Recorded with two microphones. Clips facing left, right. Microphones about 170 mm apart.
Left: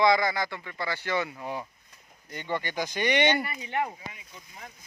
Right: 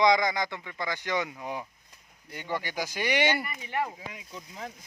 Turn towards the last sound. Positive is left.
turn(degrees=-85)